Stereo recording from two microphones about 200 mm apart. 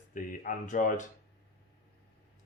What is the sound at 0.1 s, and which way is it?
Speech, 40° left (ahead or behind).